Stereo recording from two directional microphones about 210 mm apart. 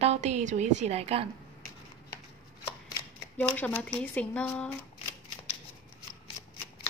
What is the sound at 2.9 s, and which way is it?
Shuffling cards, 10° left (ahead or behind).